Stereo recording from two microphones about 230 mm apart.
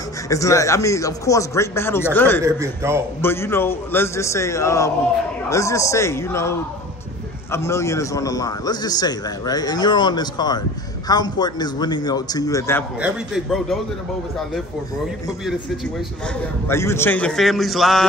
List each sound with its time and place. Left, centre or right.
0.3 s a man's voice: centre
2.4 s a man's voice: centre
3.2 s a man's voice: centre
7.5 s a man's voice: centre
13.0 s a man's voice: centre
16.6 s a man's voice: centre